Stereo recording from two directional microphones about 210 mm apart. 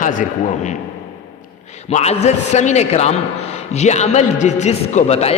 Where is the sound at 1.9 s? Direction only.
30° left (ahead or behind).